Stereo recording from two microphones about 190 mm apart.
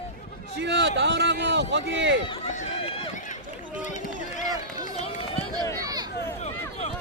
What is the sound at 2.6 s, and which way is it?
Run, 40° left (ahead or behind).